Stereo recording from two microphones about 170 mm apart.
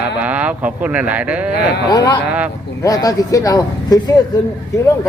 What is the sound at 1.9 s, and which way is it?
Speech, 25° left (ahead or behind).